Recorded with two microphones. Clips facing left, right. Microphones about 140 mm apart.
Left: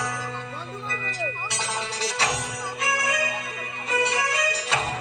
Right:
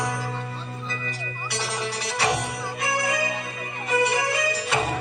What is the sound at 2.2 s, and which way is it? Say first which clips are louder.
Music: right 6 dB; 25° right (ahead or behind).